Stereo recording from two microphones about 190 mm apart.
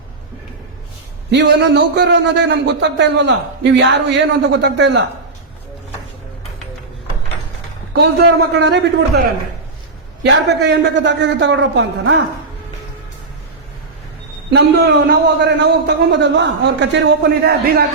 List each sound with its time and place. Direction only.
1.3 s a man's voice: 65° right (ahead or behind)
7.9 s a man's voice: 60° right (ahead or behind)
10.2 s a man's voice: 65° right (ahead or behind)
14.5 s a man's voice: 60° right (ahead or behind)